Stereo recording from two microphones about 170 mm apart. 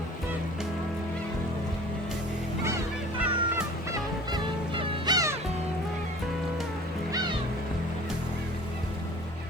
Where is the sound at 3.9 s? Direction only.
25° right (ahead or behind).